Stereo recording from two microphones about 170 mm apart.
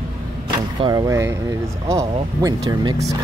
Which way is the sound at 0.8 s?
20° right (ahead or behind).